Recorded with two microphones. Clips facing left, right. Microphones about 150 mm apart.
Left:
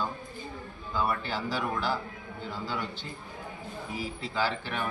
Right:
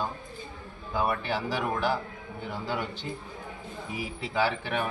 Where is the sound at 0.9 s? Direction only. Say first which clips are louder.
Right 2 dB; 15° right (ahead or behind).